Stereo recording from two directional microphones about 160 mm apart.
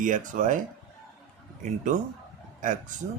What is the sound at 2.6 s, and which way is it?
Speech, 50° right (ahead or behind).